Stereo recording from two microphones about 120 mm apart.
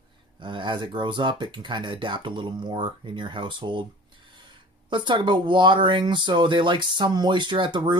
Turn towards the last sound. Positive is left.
turn(degrees=-40)  # may be behind; listen again after turning